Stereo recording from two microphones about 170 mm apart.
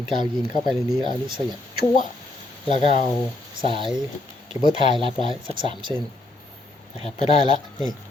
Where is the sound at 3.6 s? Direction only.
30° right (ahead or behind).